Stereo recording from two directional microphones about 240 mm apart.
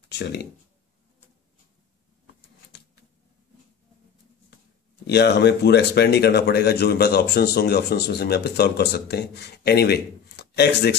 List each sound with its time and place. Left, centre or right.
0.1 s speech: left
5.0 s speech: left